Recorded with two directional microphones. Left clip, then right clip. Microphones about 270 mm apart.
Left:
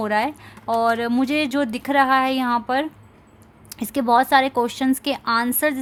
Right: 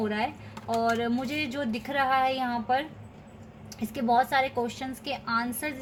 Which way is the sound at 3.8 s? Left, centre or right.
Left.